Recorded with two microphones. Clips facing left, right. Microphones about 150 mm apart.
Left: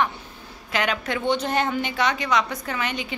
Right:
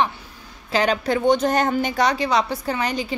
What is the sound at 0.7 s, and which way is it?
A woman's voice, 35° right (ahead or behind).